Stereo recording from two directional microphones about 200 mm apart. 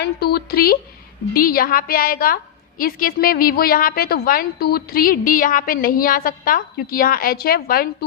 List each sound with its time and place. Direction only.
0.0 s a woman's voice: 50° left (ahead or behind)